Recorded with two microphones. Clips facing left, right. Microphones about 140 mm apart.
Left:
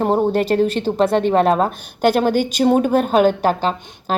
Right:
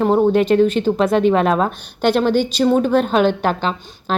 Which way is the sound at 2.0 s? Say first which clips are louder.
Even; 45° left (ahead or behind).